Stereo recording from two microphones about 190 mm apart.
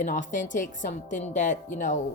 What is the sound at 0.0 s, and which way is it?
A woman's voice, 40° left (ahead or behind).